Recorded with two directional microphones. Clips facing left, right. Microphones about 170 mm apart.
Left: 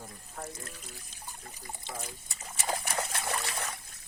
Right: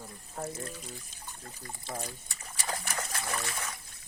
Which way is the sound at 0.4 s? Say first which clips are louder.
Right 4 dB; 30° right (ahead or behind).